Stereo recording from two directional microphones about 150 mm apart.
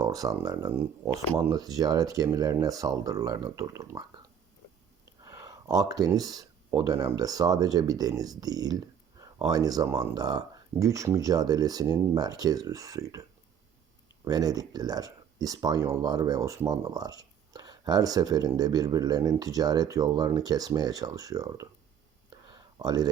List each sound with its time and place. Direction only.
0.0 s speech: 25° right (ahead or behind)
5.2 s speech: 25° right (ahead or behind)
14.3 s speech: 25° right (ahead or behind)
22.8 s speech: 25° right (ahead or behind)